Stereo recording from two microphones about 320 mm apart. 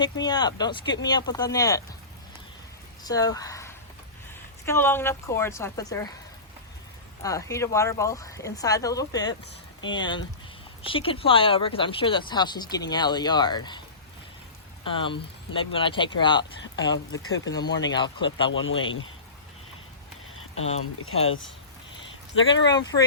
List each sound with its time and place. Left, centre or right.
0.0 s speech: centre
3.0 s speech: centre
7.2 s speech: centre
14.8 s speech: centre
17.1 s speech: left
17.5 s speech: centre
18.5 s speech: left
20.8 s speech: left
22.4 s speech: left
22.7 s speech: centre